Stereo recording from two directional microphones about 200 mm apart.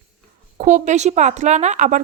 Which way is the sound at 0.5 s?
40° right (ahead or behind).